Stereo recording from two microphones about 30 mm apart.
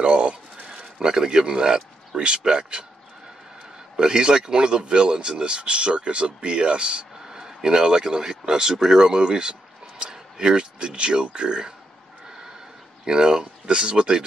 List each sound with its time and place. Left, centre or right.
0.0 s a sound: right
0.7 s a man's voice: right
3.9 s speech: right
7.2 s speech: centre
9.2 s a sound: right
10.4 s speech: right
13.0 s speech: right